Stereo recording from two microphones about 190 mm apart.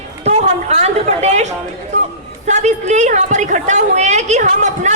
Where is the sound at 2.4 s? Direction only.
40° right (ahead or behind).